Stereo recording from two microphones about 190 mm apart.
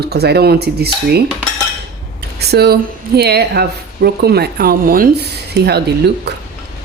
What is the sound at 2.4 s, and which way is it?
Speech, 60° right (ahead or behind).